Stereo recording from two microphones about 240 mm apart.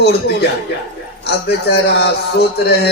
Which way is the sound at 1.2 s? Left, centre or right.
Left.